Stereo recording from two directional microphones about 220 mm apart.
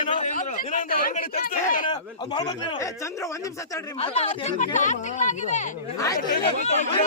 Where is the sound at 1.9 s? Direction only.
20° left (ahead or behind).